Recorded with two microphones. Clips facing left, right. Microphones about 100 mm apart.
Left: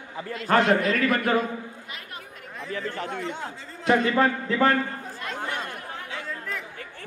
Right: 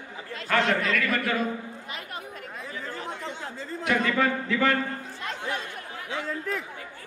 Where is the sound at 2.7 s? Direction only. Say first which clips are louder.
Left 6 dB; 65° left (ahead or behind).